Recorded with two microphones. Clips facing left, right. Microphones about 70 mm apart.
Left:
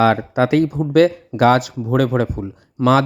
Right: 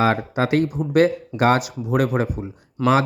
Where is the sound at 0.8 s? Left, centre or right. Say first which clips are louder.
Left 4 dB; left.